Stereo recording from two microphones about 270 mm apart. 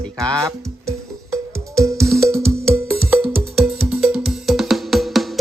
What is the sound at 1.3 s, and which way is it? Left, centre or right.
Music, centre.